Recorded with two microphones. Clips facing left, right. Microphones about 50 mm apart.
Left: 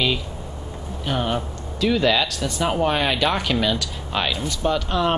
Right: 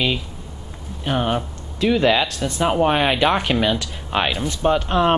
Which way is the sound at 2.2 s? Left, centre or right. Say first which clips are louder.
Right 3 dB; right.